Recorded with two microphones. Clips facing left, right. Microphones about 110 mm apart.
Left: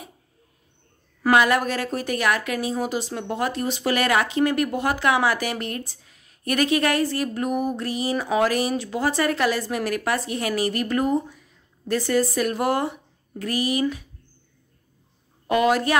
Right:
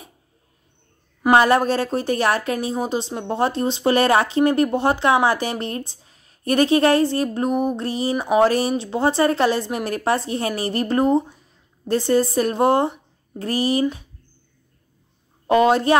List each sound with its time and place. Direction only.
1.3 s speech: 30° right (ahead or behind)
15.4 s a woman's voice: 30° right (ahead or behind)